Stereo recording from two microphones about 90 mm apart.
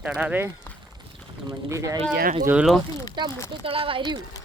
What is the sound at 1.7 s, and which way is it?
Speech, 40° right (ahead or behind).